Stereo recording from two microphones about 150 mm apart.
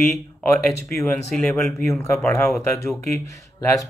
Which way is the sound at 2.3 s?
20° left (ahead or behind).